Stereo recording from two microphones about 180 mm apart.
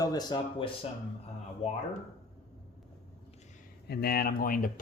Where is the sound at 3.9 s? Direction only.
60° left (ahead or behind).